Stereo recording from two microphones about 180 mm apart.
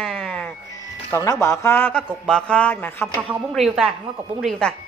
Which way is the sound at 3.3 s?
Centre (ahead or behind).